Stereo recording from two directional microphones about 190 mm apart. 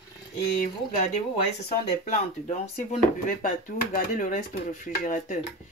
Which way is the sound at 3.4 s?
45° left (ahead or behind).